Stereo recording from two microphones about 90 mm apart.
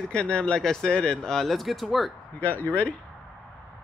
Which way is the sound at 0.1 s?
10° left (ahead or behind).